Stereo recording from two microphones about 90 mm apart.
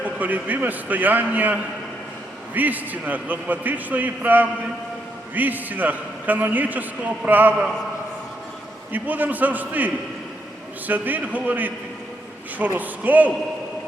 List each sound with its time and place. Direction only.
0.0 s a man's voice: 20° right (ahead or behind)
2.6 s a man's voice: 20° right (ahead or behind)
8.9 s a man's voice: 20° right (ahead or behind)